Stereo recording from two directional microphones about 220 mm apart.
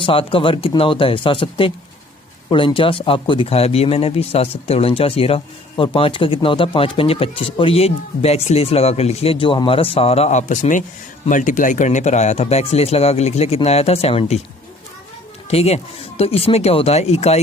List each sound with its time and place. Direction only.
0.0 s speech: 25° left (ahead or behind)
15.4 s speech: 30° left (ahead or behind)